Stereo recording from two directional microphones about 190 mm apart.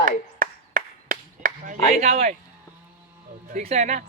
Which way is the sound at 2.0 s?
35° right (ahead or behind).